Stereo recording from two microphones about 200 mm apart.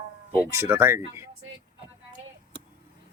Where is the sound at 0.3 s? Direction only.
15° right (ahead or behind).